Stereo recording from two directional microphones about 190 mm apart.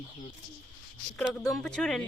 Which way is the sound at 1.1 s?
5° left (ahead or behind).